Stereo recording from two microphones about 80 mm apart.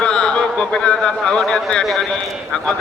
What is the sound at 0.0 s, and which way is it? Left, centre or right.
A man's voice, centre.